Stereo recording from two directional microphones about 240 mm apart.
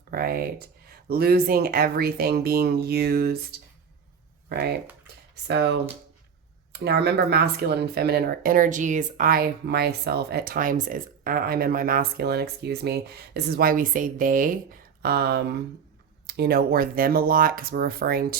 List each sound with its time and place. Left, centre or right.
0.1 s speech: right